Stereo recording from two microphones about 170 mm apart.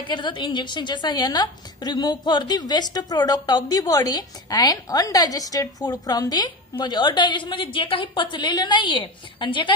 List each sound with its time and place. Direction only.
0.1 s a woman's voice: 25° left (ahead or behind)